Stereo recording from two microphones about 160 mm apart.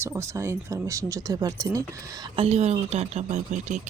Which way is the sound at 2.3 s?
40° right (ahead or behind).